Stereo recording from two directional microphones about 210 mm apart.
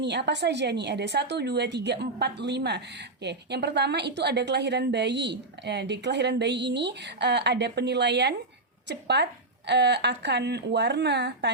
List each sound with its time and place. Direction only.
0.0 s a woman's voice: 55° right (ahead or behind)